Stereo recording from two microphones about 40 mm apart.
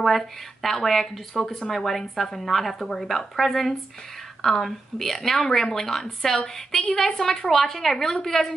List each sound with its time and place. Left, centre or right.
0.0 s a woman's voice: centre